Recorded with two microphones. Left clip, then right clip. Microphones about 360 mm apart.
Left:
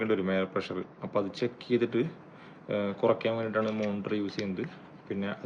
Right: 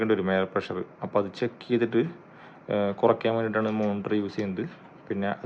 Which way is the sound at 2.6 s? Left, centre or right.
Right.